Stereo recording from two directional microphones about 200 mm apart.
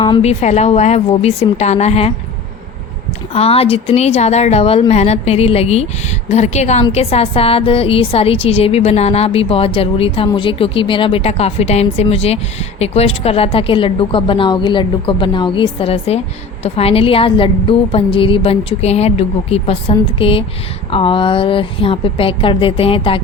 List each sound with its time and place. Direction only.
0.0 s speech: 25° left (ahead or behind)
3.3 s a woman's voice: 30° left (ahead or behind)